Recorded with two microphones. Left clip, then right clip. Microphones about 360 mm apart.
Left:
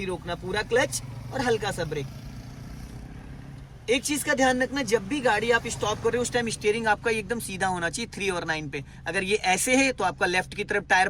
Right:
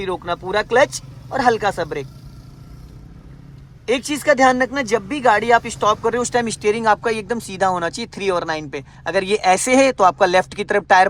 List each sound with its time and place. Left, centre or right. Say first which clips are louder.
0.0 s speech: right 9 dB; centre
3.8 s speech: right 8 dB; centre